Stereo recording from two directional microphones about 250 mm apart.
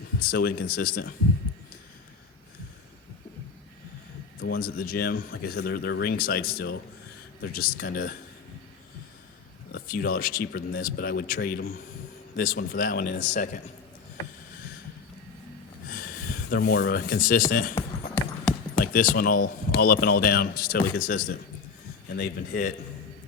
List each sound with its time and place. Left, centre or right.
0.2 s speech: left
4.4 s speech: left
9.7 s speech: left
13.3 s speech: left
15.9 s a sound: left
17.5 s speech: left
18.9 s speech: left